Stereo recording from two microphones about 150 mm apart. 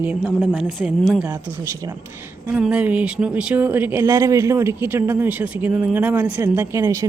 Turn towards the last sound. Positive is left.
turn(degrees=-20)  # may be behind; listen again after turning